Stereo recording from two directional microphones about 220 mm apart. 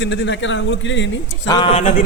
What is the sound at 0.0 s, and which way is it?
A man's voice, 55° left (ahead or behind).